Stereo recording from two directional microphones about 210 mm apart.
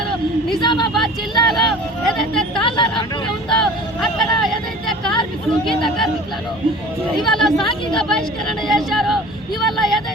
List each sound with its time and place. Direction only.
0.6 s a woman's voice: 20° left (ahead or behind)
0.9 s vehicle: centre (ahead or behind)
2.0 s a sound: centre (ahead or behind)
3.5 s vehicle: centre (ahead or behind)
5.6 s speech: centre (ahead or behind)
7.2 s speech: centre (ahead or behind)
9.6 s vehicle: centre (ahead or behind)